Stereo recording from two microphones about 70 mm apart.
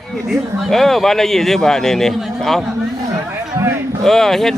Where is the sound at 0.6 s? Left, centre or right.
Centre.